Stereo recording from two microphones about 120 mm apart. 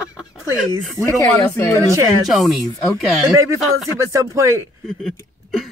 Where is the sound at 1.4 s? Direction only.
25° left (ahead or behind).